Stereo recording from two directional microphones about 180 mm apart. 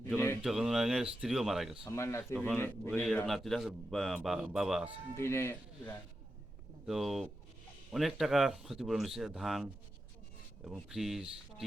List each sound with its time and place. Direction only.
0.4 s speech: centre (ahead or behind)
1.8 s speech: 15° left (ahead or behind)
3.2 s speech: centre (ahead or behind)
5.1 s speech: 15° left (ahead or behind)
6.8 s speech: centre (ahead or behind)